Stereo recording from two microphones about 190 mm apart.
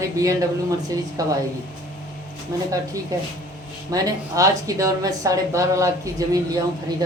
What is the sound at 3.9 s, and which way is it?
A woman's voice, 20° right (ahead or behind).